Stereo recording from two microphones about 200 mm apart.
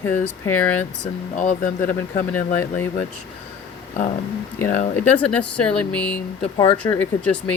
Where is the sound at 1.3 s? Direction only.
40° left (ahead or behind).